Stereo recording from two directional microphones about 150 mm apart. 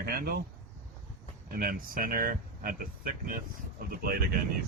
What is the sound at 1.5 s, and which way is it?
Speech, 75° right (ahead or behind).